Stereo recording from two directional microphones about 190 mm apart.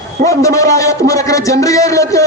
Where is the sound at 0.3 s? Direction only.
15° left (ahead or behind).